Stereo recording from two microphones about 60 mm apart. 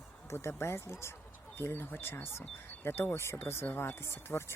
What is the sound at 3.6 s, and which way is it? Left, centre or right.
Speech, left.